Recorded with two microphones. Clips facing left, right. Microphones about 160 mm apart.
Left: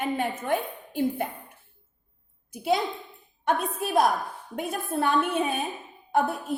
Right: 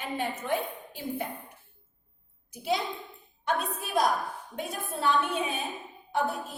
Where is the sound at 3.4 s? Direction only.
55° left (ahead or behind).